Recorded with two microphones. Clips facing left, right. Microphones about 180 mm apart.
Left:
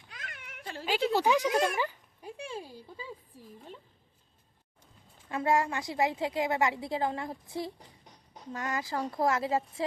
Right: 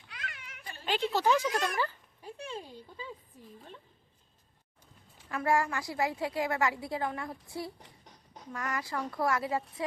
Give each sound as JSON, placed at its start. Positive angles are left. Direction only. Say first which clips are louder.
{"t": 0.1, "sound": "a sound", "louder": "right 1 dB", "side_deg": 50}
{"t": 1.1, "sound": "speech", "louder": "left 2 dB", "side_deg": 15}
{"t": 5.3, "sound": "a woman's voice", "louder": "left 1 dB", "side_deg": 20}